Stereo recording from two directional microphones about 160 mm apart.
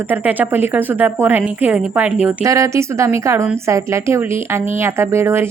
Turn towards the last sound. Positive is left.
turn(degrees=-15)  # may be behind; listen again after turning